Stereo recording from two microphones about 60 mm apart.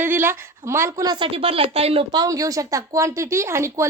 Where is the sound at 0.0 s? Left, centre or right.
Right.